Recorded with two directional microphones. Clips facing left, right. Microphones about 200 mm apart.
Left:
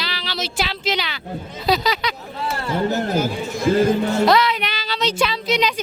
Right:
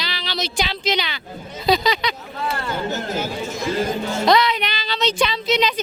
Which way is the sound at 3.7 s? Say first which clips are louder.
Left 7 dB; 60° left (ahead or behind).